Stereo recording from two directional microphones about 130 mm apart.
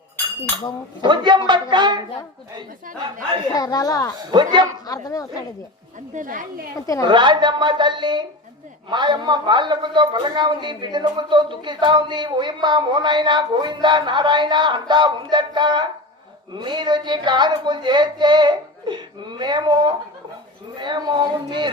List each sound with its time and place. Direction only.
1.0 s a man's voice: 35° right (ahead or behind)
3.5 s speech: 30° left (ahead or behind)
4.3 s a man's voice: 35° right (ahead or behind)
4.9 s speech: 25° left (ahead or behind)
6.1 s a woman's voice: 90° right
7.0 s a man's voice: 35° right (ahead or behind)